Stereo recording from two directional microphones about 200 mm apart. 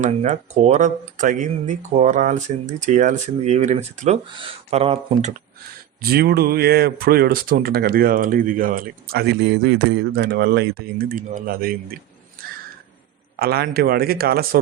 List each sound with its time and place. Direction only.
0.0 s speech: 35° right (ahead or behind)
6.0 s speech: 50° right (ahead or behind)
13.4 s speech: 50° right (ahead or behind)